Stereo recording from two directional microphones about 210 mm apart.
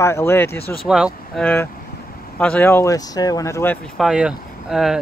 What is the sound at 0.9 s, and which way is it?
Speech, centre (ahead or behind).